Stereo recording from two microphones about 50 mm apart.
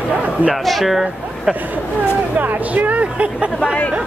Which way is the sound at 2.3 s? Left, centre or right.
Right.